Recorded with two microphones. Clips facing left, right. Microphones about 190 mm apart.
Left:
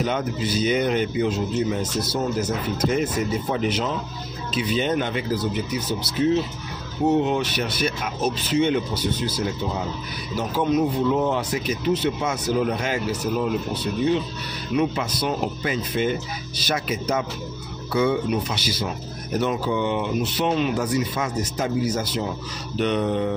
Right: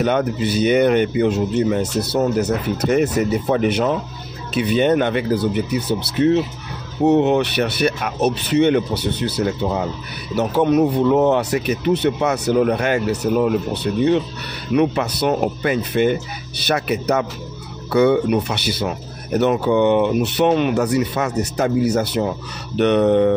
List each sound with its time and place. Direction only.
0.0 s speech: 65° right (ahead or behind)
14.8 s speech: 60° right (ahead or behind)